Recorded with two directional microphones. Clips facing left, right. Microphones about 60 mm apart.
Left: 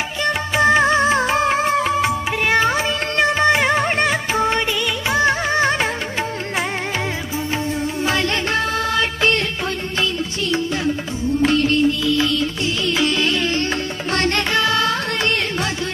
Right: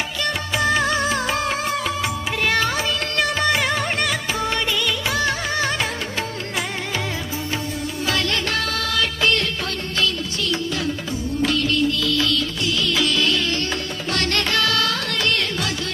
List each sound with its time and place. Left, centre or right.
0.2 s music of bollywood: left
8.0 s music: left
11.4 s music: left